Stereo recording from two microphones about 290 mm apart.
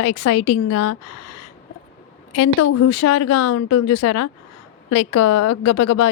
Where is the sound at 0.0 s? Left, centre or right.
Left.